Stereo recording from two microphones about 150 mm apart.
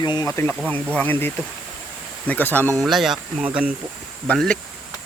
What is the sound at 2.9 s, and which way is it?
Speech, centre (ahead or behind).